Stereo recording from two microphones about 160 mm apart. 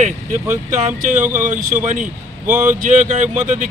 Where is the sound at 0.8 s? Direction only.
50° right (ahead or behind).